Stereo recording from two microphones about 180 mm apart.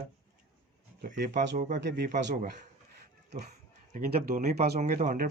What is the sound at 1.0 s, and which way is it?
Speech, 45° right (ahead or behind).